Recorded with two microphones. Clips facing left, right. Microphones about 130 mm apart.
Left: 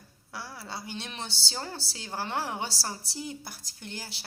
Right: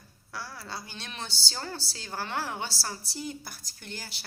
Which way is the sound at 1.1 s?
25° left (ahead or behind).